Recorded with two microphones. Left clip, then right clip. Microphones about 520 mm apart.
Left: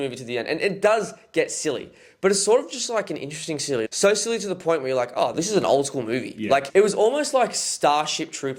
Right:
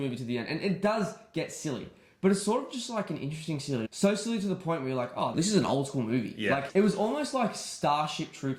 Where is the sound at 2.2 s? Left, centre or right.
Left.